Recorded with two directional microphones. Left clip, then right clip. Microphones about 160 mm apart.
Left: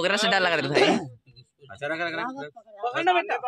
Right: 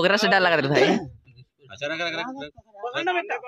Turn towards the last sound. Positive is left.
turn(degrees=30)  # may be behind; listen again after turning